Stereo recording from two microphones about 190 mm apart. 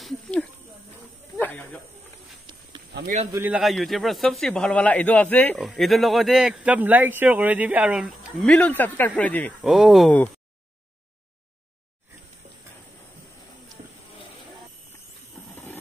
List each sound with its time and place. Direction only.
0.0 s snake: 5° left (ahead or behind)
2.9 s speech: 60° right (ahead or behind)
3.4 s speech: centre (ahead or behind)
15.5 s a sound: 10° left (ahead or behind)